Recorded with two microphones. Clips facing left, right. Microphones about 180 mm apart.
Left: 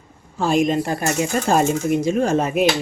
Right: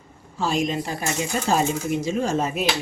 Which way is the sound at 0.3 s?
55° left (ahead or behind).